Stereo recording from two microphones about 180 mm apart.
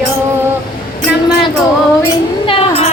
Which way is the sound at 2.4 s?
30° left (ahead or behind).